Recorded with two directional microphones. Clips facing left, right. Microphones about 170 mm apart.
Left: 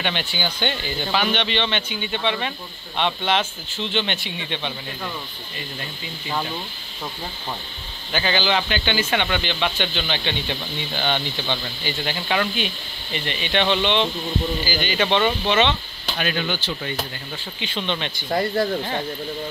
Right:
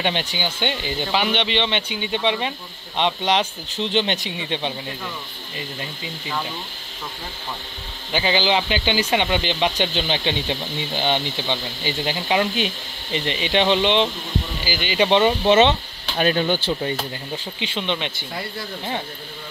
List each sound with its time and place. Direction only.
0.0 s speech: 25° right (ahead or behind)
8.1 s speech: 5° right (ahead or behind)
8.4 s speech: 25° right (ahead or behind)
8.6 s speech: 10° right (ahead or behind)
9.8 s speech: 40° right (ahead or behind)
10.2 s speech: 20° right (ahead or behind)
14.6 s speech: 90° right
15.4 s speech: 35° right (ahead or behind)
17.7 s speech: 15° right (ahead or behind)
18.3 s speech: 45° left (ahead or behind)